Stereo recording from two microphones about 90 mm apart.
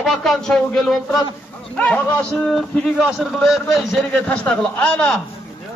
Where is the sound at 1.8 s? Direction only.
15° left (ahead or behind).